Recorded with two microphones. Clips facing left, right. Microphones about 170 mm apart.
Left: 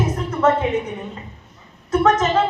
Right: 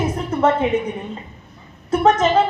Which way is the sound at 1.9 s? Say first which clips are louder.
Right 1 dB; 30° right (ahead or behind).